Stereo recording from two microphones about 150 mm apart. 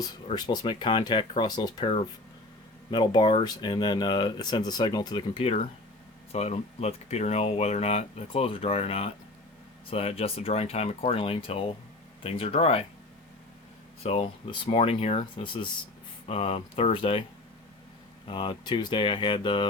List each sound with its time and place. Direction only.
0.3 s speech: 30° left (ahead or behind)
14.0 s speech: 50° left (ahead or behind)
14.6 s speech: 40° left (ahead or behind)
18.3 s speech: 35° left (ahead or behind)